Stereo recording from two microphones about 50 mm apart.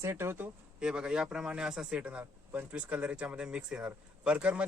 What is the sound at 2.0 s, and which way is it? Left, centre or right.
Speech, right.